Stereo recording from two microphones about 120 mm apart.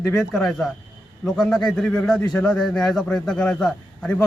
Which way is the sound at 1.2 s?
5° left (ahead or behind).